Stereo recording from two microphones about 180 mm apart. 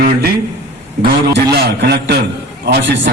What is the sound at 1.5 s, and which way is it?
A man's voice, 65° right (ahead or behind).